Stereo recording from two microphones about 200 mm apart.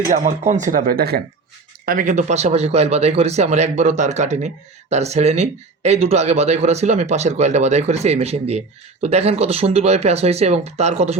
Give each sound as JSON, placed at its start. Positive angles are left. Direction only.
{"t": 0.1, "sound": "speech", "side_deg": -35}